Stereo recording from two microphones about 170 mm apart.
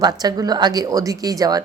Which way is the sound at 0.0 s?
25° right (ahead or behind).